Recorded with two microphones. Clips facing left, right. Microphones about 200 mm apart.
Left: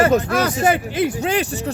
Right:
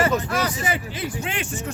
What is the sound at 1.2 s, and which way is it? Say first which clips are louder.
Speech: left 9 dB; 40° left (ahead or behind).